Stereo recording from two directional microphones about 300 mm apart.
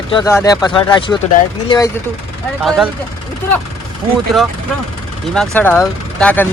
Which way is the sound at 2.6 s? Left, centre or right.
Centre.